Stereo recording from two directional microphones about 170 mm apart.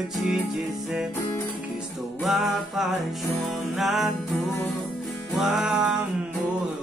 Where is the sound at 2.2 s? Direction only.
Centre (ahead or behind).